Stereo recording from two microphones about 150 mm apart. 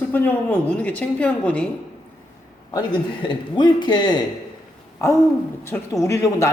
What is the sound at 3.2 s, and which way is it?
Speech, 30° left (ahead or behind).